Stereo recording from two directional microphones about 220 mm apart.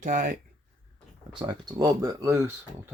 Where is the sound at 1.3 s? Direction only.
20° right (ahead or behind).